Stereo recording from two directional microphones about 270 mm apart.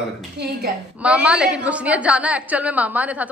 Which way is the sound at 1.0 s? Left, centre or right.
Centre.